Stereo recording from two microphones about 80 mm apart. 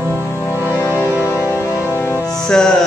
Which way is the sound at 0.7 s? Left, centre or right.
Left.